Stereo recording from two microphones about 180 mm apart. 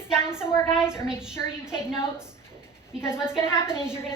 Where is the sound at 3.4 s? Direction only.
15° left (ahead or behind).